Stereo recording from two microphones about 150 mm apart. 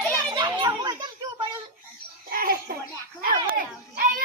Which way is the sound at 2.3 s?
75° right (ahead or behind).